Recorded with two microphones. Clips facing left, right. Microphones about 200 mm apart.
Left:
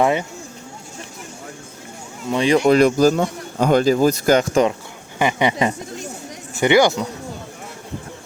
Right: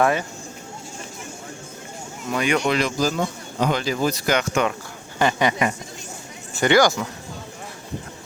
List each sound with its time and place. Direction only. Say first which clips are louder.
0.0 s speech: left 2 dB; 20° left (ahead or behind)
2.3 s speech: left 6 dB; 30° left (ahead or behind)
2.7 s speech: left 8 dB; 50° left (ahead or behind)
5.2 s speech: left 2 dB; 20° left (ahead or behind)